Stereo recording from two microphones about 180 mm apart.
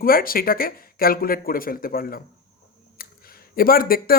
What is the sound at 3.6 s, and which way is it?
Speech, 55° left (ahead or behind).